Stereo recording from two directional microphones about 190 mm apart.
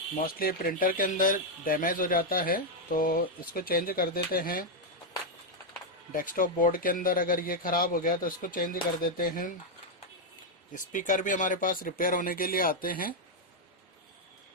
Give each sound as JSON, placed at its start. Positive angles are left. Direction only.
{"t": 0.2, "sound": "speech", "side_deg": 50}
{"t": 6.1, "sound": "speech", "side_deg": 45}
{"t": 10.7, "sound": "speech", "side_deg": 45}